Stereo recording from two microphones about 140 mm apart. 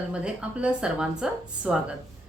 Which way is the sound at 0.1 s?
5° right (ahead or behind).